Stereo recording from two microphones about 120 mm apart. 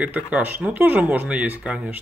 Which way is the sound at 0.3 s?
15° right (ahead or behind).